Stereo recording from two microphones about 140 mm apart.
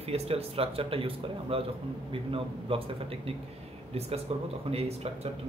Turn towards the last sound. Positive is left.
turn(degrees=-45)  # may be behind; listen again after turning